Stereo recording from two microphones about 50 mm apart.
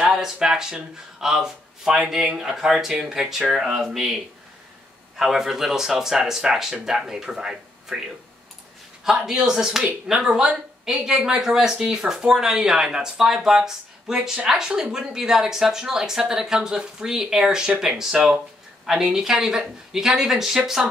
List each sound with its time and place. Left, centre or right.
0.1 s speech: centre
9.0 s speech: centre